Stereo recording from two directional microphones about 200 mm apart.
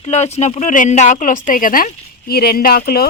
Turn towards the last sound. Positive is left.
turn(degrees=50)  # may be behind; listen again after turning